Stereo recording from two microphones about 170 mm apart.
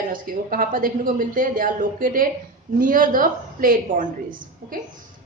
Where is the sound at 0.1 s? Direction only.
55° right (ahead or behind).